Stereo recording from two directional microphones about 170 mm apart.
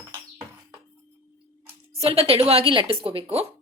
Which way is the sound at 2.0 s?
35° right (ahead or behind).